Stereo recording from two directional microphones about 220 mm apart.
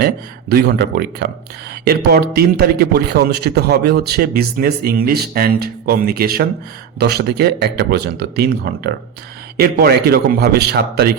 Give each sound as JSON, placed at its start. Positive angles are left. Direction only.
{"t": 0.5, "sound": "a man's voice", "side_deg": -50}